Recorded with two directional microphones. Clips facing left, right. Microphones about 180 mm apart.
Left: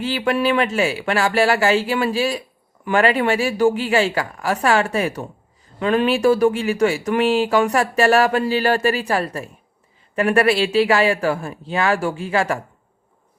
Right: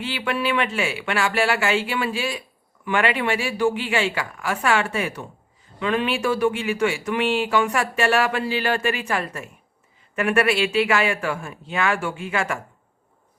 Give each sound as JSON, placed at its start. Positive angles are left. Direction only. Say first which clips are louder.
{"t": 0.0, "sound": "speech", "louder": "left 6 dB", "side_deg": 40}